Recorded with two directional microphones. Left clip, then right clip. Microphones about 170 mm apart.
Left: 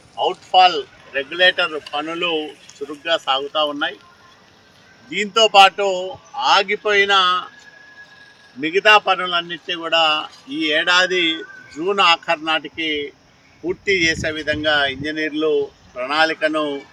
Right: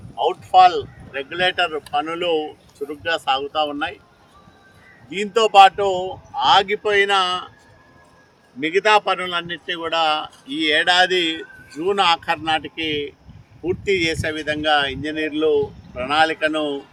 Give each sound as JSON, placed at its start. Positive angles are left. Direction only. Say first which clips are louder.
{"t": 0.2, "sound": "a man's voice", "louder": "right 1 dB", "side_deg": -30}
{"t": 2.7, "sound": "a man's voice", "louder": "left 2 dB", "side_deg": -30}
{"t": 5.1, "sound": "speech", "louder": "left 1 dB", "side_deg": -35}
{"t": 8.6, "sound": "a man's voice", "louder": "left 3 dB", "side_deg": -20}